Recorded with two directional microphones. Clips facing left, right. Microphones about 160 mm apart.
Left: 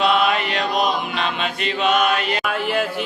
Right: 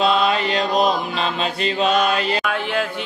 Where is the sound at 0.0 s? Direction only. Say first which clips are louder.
Even; 30° right (ahead or behind).